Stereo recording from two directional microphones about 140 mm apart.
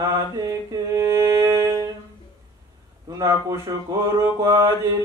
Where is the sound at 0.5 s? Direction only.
20° right (ahead or behind).